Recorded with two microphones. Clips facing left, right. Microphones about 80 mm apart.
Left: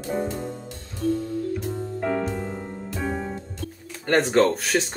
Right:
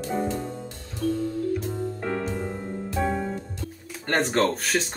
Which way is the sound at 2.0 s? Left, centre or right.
Centre.